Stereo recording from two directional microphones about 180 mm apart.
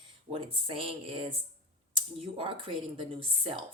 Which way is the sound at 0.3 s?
30° right (ahead or behind).